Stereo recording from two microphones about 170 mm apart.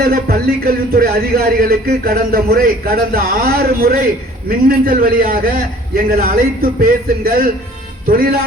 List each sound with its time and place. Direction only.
0.0 s a man's voice: 60° right (ahead or behind)